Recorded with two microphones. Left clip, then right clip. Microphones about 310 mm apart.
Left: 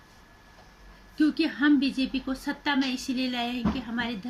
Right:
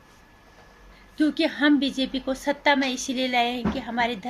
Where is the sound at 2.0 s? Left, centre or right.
Right.